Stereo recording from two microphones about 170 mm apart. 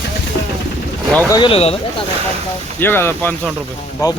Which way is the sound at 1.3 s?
30° left (ahead or behind).